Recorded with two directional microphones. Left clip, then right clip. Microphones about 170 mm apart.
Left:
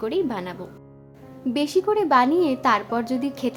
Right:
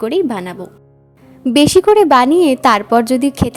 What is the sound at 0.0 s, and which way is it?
Speech, 35° right (ahead or behind).